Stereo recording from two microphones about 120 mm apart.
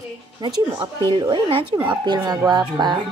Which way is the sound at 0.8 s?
35° right (ahead or behind).